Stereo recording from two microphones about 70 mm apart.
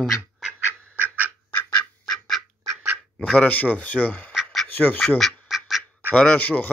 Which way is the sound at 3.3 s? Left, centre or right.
Centre.